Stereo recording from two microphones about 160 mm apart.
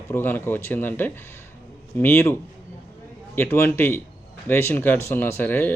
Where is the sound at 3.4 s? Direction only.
15° left (ahead or behind).